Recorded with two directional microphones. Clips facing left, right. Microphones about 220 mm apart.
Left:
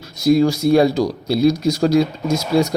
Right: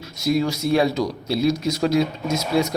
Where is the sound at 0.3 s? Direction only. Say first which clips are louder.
Left 7 dB; 35° left (ahead or behind).